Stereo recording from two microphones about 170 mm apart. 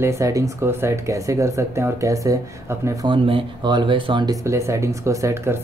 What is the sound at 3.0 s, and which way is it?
Speech, 30° right (ahead or behind).